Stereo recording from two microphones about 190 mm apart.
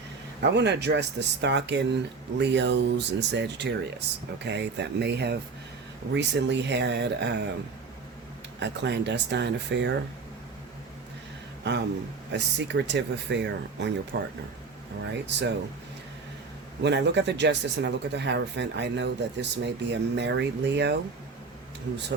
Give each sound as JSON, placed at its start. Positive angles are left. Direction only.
{"t": 0.5, "sound": "speech", "side_deg": -65}
{"t": 8.5, "sound": "speech", "side_deg": -65}
{"t": 11.6, "sound": "speech", "side_deg": -65}
{"t": 15.3, "sound": "speech", "side_deg": -65}
{"t": 16.8, "sound": "speech", "side_deg": -65}